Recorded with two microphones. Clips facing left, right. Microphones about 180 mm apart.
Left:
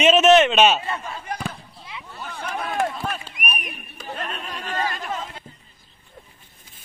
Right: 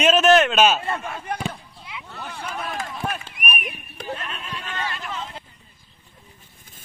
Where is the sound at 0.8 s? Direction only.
55° right (ahead or behind).